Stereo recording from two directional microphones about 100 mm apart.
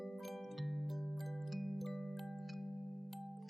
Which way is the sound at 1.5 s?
Centre (ahead or behind).